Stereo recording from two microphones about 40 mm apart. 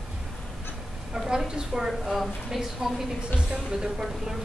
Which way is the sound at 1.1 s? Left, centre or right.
Centre.